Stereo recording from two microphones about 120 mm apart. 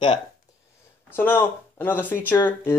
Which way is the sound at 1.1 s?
15° left (ahead or behind).